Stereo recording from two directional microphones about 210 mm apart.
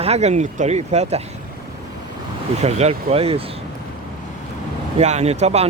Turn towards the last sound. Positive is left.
turn(degrees=-30)  # may be behind; listen again after turning